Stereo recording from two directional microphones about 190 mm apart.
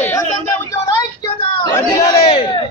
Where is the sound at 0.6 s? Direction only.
20° left (ahead or behind).